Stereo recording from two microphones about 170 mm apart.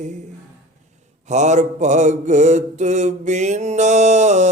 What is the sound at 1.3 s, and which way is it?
Mantra, 45° right (ahead or behind).